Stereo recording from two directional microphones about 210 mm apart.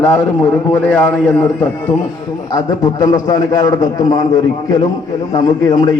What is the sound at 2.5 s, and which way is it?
A man's voice, 15° left (ahead or behind).